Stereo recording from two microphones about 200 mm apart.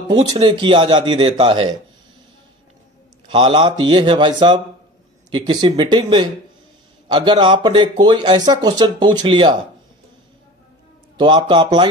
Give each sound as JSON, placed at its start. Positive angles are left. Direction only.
{"t": 0.1, "sound": "speech", "side_deg": -25}
{"t": 3.3, "sound": "speech", "side_deg": -25}
{"t": 11.1, "sound": "speech", "side_deg": -25}